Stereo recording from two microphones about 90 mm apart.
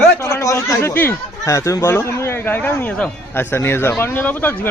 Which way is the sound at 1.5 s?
35° left (ahead or behind).